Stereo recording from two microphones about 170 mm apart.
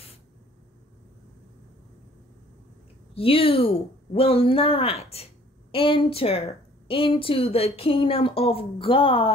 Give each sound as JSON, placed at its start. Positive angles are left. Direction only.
{"t": 3.2, "sound": "speech", "side_deg": 35}